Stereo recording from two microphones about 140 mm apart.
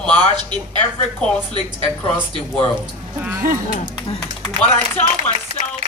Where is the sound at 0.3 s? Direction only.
30° right (ahead or behind).